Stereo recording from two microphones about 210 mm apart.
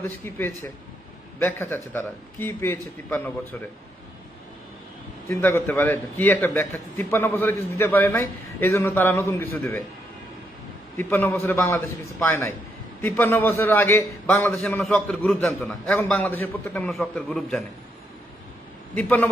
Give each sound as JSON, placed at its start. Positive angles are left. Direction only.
{"t": 0.3, "sound": "a man's voice", "side_deg": 15}
{"t": 5.3, "sound": "a man's voice", "side_deg": 10}
{"t": 10.9, "sound": "a man's voice", "side_deg": 10}
{"t": 18.9, "sound": "a man's voice", "side_deg": 10}